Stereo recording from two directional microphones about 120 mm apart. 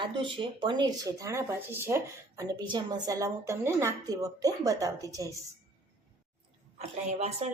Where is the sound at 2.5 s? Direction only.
35° right (ahead or behind).